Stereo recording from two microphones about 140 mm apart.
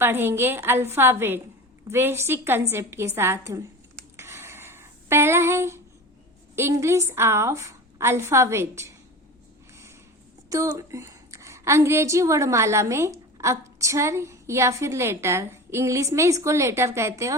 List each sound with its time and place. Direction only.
0.0 s a woman's voice: 15° right (ahead or behind)
4.2 s a sound: 20° right (ahead or behind)
6.6 s a woman's voice: 20° right (ahead or behind)
10.5 s a woman's voice: 25° right (ahead or behind)